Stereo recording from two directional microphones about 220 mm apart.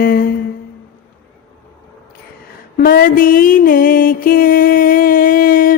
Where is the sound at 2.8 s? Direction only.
40° left (ahead or behind).